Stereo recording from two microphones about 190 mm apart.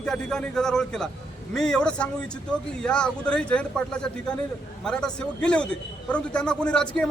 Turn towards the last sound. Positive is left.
turn(degrees=5)  # may be behind; listen again after turning